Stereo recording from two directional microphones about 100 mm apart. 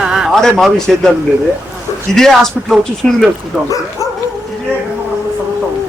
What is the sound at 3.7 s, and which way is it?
Speech, 35° left (ahead or behind).